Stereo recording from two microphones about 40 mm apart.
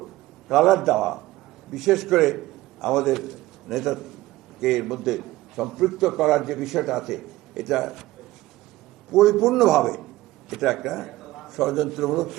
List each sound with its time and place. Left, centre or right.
0.0 s a sound: centre
1.7 s a man's voice: centre
9.1 s a man's voice: centre